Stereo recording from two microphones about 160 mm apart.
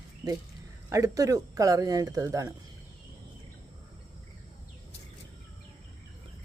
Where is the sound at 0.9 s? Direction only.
20° right (ahead or behind).